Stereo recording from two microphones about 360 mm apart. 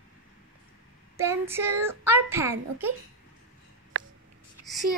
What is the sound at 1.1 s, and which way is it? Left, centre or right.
A woman's voice, centre.